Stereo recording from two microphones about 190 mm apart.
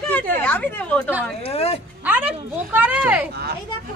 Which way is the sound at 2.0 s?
10° right (ahead or behind).